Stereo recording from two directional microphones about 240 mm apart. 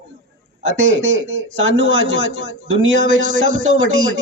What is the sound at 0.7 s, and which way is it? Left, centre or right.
Speech, right.